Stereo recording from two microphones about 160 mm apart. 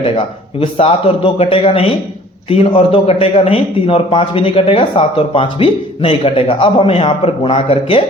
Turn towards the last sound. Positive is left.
turn(degrees=35)  # may be behind; listen again after turning